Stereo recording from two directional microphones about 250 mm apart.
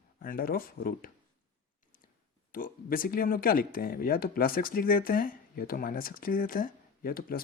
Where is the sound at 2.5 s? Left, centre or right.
Left.